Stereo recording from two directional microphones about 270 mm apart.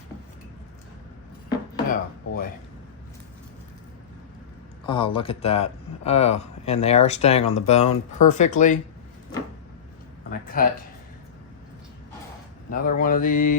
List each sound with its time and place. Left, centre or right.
1.9 s speech: left
4.9 s speech: centre
10.2 s mantra: left
12.7 s mantra: left